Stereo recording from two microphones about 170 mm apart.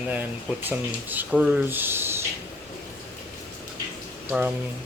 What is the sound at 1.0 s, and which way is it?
Speech, 10° right (ahead or behind).